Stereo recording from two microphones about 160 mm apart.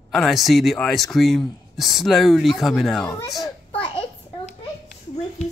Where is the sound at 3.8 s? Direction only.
30° left (ahead or behind).